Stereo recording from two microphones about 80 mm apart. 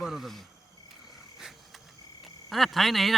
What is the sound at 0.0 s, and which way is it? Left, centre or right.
Cricket, centre.